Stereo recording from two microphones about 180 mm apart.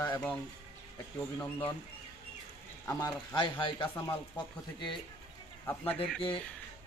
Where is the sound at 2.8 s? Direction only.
25° left (ahead or behind).